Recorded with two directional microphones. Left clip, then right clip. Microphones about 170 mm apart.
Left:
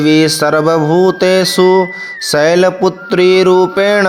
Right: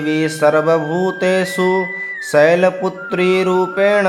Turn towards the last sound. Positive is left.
turn(degrees=45)  # may be behind; listen again after turning